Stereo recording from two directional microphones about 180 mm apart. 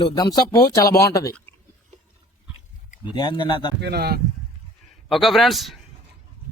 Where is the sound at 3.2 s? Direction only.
25° left (ahead or behind).